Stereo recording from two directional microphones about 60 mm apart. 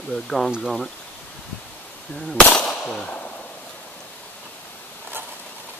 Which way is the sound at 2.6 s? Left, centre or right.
Centre.